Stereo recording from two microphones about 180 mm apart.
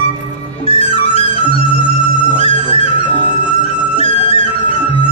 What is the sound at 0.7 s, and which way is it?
Music, 30° left (ahead or behind).